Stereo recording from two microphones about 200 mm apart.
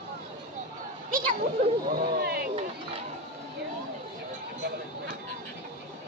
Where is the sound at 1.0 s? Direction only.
45° right (ahead or behind).